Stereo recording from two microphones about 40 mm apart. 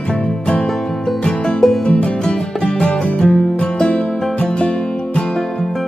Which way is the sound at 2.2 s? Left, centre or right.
Centre.